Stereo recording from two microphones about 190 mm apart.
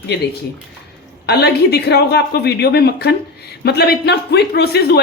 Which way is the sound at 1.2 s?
60° left (ahead or behind).